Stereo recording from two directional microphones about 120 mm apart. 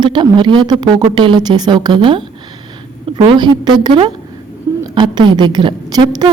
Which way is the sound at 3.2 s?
40° right (ahead or behind).